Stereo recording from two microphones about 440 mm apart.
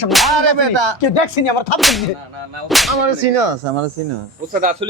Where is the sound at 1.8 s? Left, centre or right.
Centre.